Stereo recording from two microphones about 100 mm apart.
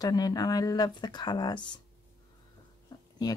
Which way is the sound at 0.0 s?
40° left (ahead or behind).